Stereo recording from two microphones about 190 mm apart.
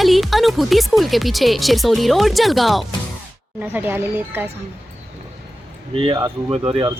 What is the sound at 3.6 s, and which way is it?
Speech, 10° right (ahead or behind).